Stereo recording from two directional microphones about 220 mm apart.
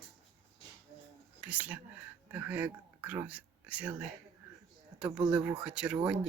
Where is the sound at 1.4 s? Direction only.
5° right (ahead or behind).